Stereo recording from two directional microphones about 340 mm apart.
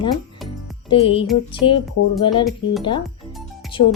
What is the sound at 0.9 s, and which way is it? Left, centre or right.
Speech, centre.